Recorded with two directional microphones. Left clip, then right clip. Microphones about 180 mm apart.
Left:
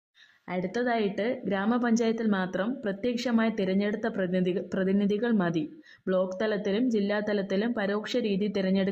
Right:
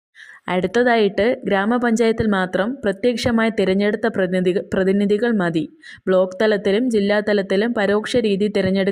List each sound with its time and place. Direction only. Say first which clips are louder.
0.4 s speech: right 12 dB; 40° right (ahead or behind)